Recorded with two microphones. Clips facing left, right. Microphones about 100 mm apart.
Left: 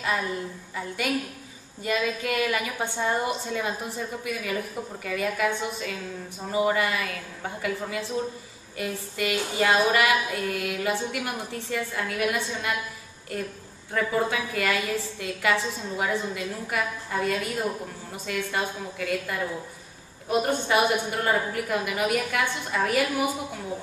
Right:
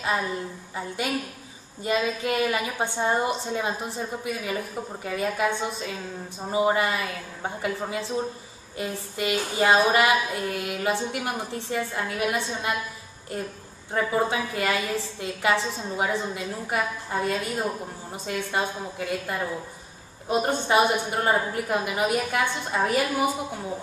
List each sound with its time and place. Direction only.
0.0 s a woman's voice: 25° right (ahead or behind)
13.9 s a woman's voice: 25° right (ahead or behind)